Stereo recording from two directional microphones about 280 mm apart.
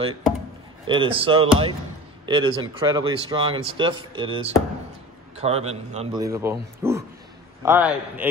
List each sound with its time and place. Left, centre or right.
0.8 s a man's voice: centre